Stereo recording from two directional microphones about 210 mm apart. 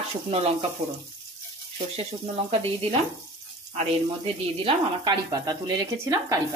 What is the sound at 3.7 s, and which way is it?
Speech, 30° right (ahead or behind).